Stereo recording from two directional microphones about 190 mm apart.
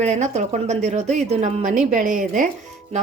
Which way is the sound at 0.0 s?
35° right (ahead or behind).